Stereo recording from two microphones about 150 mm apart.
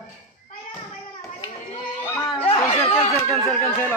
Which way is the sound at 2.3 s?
40° left (ahead or behind).